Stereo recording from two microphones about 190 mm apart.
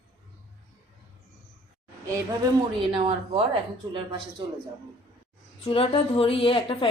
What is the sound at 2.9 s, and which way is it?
Speech, 25° right (ahead or behind).